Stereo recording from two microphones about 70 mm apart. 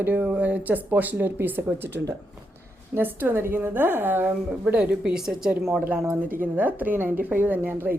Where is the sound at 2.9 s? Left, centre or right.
Right.